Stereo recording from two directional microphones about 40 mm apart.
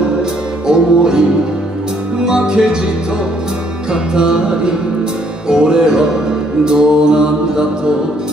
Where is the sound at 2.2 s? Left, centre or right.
Centre.